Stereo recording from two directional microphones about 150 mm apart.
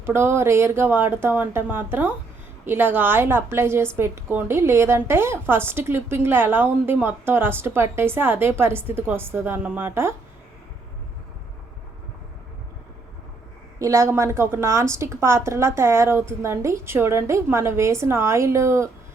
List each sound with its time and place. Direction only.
0.0 s a woman's voice: 15° right (ahead or behind)
13.7 s a woman's voice: 20° right (ahead or behind)